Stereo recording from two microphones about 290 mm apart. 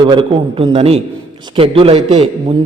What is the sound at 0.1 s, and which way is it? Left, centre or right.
A man's voice, centre.